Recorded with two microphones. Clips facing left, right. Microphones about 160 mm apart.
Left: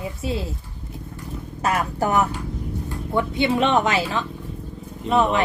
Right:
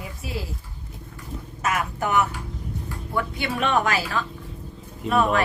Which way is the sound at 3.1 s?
20° left (ahead or behind).